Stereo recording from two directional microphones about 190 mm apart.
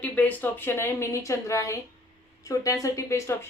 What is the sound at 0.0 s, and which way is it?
A woman's voice, 5° left (ahead or behind).